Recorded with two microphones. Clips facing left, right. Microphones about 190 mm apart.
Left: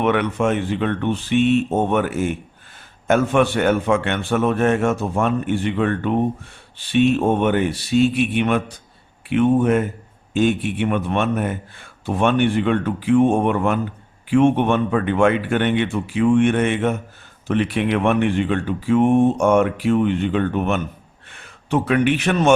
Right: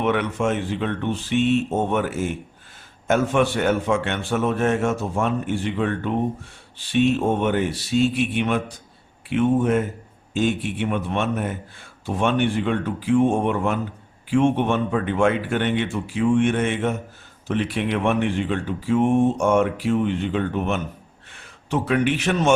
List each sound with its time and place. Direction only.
0.0 s a man's voice: 60° left (ahead or behind)